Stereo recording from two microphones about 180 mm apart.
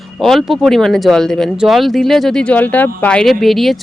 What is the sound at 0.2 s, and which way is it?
Speech, centre (ahead or behind).